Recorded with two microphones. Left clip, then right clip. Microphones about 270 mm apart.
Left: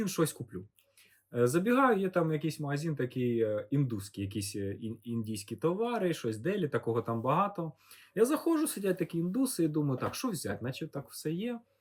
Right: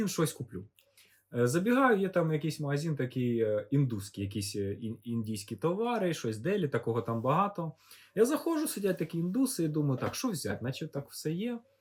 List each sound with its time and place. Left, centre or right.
0.0 s speech: centre